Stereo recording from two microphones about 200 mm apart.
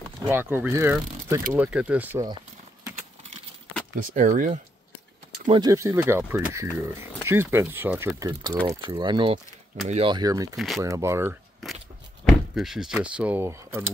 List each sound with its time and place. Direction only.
0.2 s speech: 10° right (ahead or behind)
3.9 s speech: 40° right (ahead or behind)
5.5 s speech: 20° right (ahead or behind)
10.5 s speech: centre (ahead or behind)
10.8 s speech: 15° right (ahead or behind)
12.3 s speech: centre (ahead or behind)